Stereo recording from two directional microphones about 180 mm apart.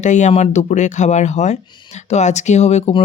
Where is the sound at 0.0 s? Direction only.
40° left (ahead or behind).